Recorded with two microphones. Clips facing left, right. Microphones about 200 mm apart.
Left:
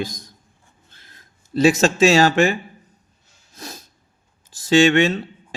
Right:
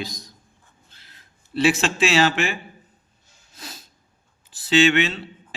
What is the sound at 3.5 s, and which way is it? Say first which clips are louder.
Snort: left 5 dB; 45° left (ahead or behind).